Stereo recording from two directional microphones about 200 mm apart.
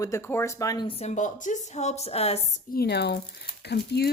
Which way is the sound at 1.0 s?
40° left (ahead or behind).